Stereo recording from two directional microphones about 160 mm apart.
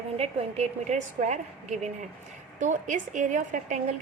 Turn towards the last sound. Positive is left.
turn(degrees=-50)  # may be behind; listen again after turning